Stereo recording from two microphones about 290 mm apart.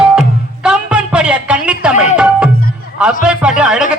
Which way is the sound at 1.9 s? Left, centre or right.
Left.